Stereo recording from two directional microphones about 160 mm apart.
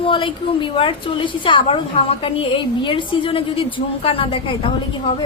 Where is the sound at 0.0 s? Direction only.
35° left (ahead or behind).